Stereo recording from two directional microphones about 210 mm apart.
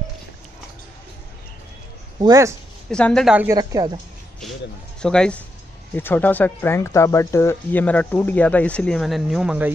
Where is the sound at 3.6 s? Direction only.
15° right (ahead or behind).